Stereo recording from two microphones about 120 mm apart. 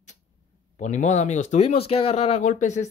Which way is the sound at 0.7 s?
80° left.